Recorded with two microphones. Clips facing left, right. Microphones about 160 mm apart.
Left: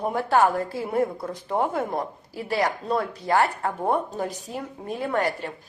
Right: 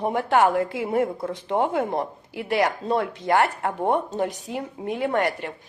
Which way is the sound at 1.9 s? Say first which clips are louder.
Right 2 dB; 25° right (ahead or behind).